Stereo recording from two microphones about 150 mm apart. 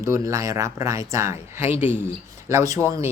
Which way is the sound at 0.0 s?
20° right (ahead or behind).